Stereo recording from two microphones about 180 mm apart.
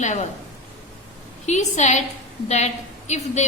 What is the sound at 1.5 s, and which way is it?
Speech, 40° left (ahead or behind).